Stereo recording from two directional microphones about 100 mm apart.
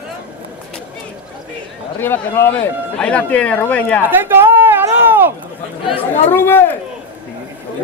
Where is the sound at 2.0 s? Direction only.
20° left (ahead or behind).